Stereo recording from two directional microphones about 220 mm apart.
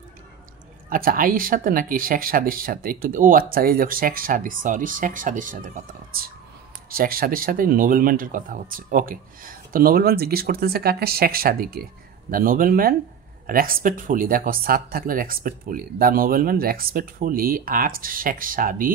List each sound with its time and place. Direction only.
0.8 s speech: 40° right (ahead or behind)